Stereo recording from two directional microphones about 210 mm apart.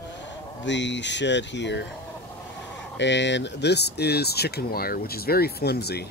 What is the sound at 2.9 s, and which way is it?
Speech, 60° left (ahead or behind).